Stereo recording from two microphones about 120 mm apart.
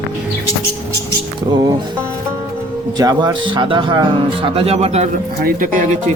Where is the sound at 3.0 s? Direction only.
30° right (ahead or behind).